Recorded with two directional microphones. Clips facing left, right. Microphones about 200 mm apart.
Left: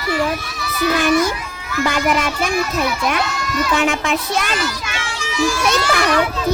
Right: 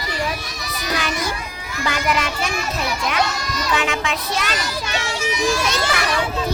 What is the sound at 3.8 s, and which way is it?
Speech, 45° left (ahead or behind).